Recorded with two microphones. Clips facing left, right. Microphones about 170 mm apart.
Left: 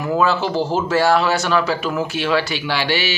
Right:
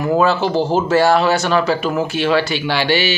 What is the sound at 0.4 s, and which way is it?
Speech, 25° right (ahead or behind).